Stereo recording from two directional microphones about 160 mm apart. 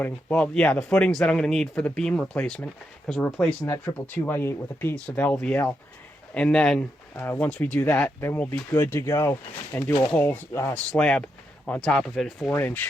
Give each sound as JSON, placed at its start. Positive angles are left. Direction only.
{"t": 0.0, "sound": "speech", "side_deg": 10}
{"t": 10.9, "sound": "speech", "side_deg": 5}